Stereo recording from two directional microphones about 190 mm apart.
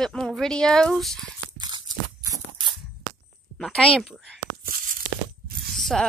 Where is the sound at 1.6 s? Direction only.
20° right (ahead or behind).